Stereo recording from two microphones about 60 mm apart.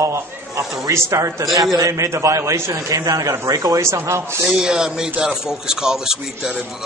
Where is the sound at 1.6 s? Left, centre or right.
Right.